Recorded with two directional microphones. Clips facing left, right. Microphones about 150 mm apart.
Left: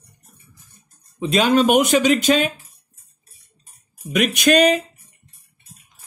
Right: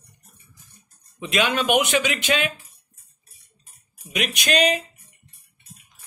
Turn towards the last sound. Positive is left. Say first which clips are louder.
# left 6 dB
turn(degrees=50)  # may be behind; listen again after turning